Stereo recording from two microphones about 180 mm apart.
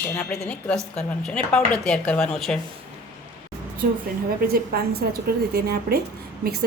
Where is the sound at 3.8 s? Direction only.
55° right (ahead or behind).